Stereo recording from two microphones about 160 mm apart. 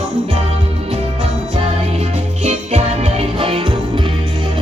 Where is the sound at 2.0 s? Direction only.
40° right (ahead or behind).